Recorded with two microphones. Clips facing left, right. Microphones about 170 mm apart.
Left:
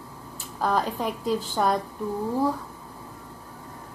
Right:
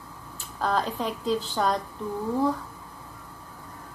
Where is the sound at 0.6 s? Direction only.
10° left (ahead or behind).